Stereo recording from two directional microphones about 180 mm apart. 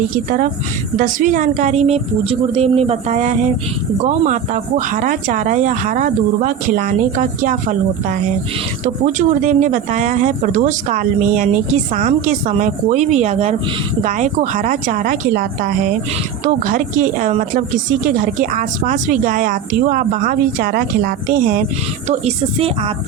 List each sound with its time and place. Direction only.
0.9 s a woman's voice: 45° right (ahead or behind)
8.8 s speech: 45° right (ahead or behind)
16.6 s speech: 45° right (ahead or behind)